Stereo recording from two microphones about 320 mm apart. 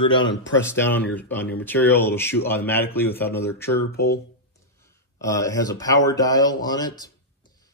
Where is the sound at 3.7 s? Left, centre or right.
Left.